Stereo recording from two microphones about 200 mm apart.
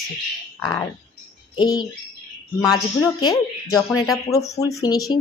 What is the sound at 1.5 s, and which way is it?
Speech, 20° left (ahead or behind).